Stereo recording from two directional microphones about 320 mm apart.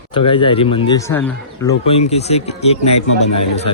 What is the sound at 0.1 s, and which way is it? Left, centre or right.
A man's voice, centre.